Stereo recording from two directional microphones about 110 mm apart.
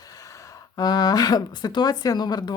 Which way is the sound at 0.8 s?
35° left (ahead or behind).